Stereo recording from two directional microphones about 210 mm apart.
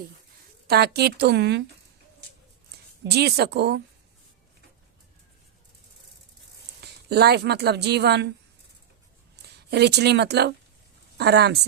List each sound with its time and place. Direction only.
0.7 s speech: 50° right (ahead or behind)
3.2 s speech: 50° right (ahead or behind)
6.8 s speech: 50° right (ahead or behind)
9.3 s speech: 50° right (ahead or behind)